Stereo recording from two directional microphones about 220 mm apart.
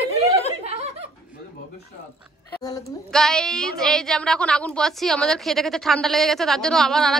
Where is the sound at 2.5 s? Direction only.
15° left (ahead or behind).